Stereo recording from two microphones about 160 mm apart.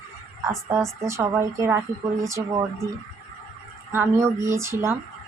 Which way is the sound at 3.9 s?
15° right (ahead or behind).